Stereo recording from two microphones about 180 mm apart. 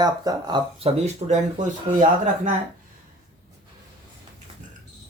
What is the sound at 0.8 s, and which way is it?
Speech, 35° right (ahead or behind).